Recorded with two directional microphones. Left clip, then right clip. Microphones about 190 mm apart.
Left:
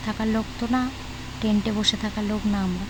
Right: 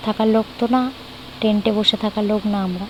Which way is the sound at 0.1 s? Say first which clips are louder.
Right 10 dB; 15° right (ahead or behind).